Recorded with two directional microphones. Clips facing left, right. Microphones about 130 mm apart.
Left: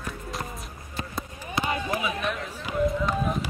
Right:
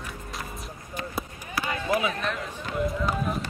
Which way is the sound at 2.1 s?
5° left (ahead or behind).